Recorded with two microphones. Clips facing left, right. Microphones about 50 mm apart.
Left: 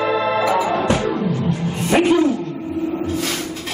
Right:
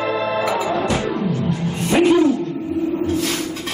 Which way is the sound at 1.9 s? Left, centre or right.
Centre.